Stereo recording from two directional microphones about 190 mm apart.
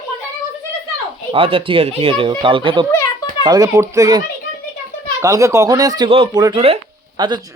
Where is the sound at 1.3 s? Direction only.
30° right (ahead or behind).